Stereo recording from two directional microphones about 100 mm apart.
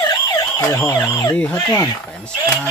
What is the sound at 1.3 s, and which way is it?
Speech, 15° left (ahead or behind).